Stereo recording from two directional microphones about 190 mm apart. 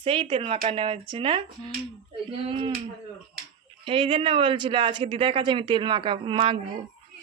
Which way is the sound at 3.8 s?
30° right (ahead or behind).